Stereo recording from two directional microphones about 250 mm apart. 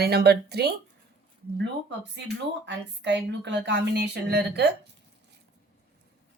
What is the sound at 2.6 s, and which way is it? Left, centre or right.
Speech, right.